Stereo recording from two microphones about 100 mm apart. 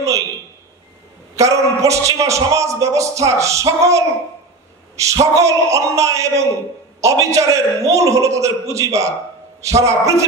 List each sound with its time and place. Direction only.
1.3 s a man's voice: 35° right (ahead or behind)